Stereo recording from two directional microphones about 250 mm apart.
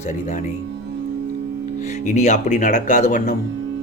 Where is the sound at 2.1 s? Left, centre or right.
Left.